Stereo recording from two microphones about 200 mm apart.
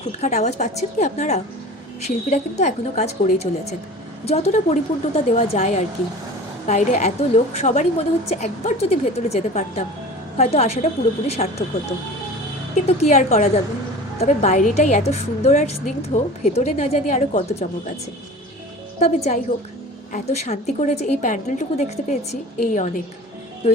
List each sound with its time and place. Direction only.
0.2 s a woman's voice: 35° left (ahead or behind)
12.7 s a woman's voice: 35° left (ahead or behind)
18.9 s a woman's voice: 35° left (ahead or behind)